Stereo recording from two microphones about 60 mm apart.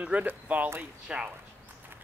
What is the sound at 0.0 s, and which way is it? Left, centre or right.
Speech, right.